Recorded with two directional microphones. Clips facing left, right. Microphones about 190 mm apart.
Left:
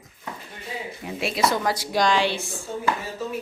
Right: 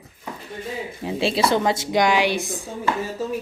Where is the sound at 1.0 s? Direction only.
30° right (ahead or behind).